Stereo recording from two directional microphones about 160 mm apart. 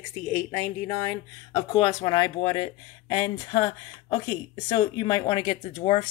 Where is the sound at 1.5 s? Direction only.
30° left (ahead or behind).